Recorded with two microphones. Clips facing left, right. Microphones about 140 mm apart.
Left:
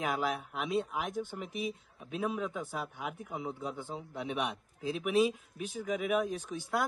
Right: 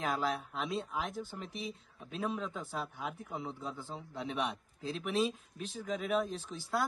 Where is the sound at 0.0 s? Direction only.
10° left (ahead or behind).